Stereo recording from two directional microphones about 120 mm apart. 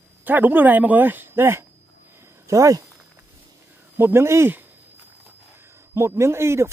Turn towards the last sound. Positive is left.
turn(degrees=-20)  # may be behind; listen again after turning